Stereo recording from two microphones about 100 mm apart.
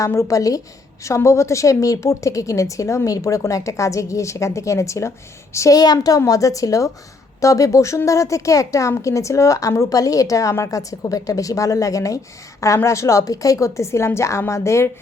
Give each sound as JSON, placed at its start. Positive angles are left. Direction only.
{"t": 0.0, "sound": "a woman's voice", "side_deg": 30}